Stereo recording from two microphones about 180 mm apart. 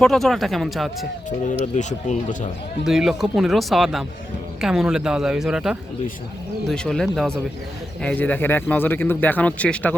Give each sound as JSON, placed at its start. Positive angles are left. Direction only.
{"t": 0.0, "sound": "speech", "side_deg": 0}
{"t": 1.7, "sound": "speech", "side_deg": 40}
{"t": 2.8, "sound": "speech", "side_deg": 0}